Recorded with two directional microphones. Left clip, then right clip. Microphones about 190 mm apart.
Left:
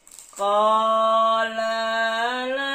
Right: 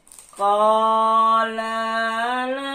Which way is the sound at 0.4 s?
25° left (ahead or behind).